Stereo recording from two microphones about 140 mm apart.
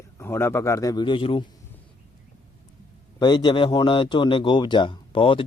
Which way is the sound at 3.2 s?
35° left (ahead or behind).